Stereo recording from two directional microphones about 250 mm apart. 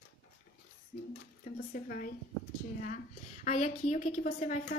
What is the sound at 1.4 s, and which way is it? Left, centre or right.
Speech, left.